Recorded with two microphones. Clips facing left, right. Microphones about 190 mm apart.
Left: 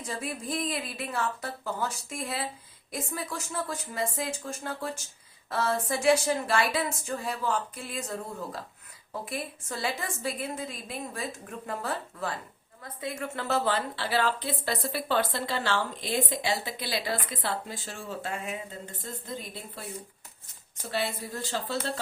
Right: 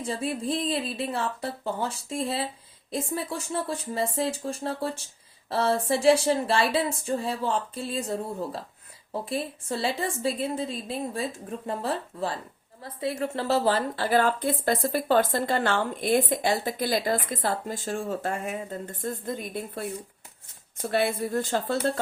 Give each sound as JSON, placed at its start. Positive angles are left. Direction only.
{"t": 0.0, "sound": "a woman's voice", "side_deg": -30}
{"t": 20.9, "sound": "speech", "side_deg": -55}